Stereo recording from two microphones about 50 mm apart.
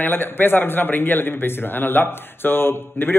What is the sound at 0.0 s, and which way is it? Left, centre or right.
A man's voice, left.